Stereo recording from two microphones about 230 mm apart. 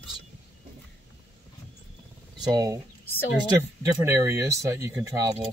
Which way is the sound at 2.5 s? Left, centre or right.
Centre.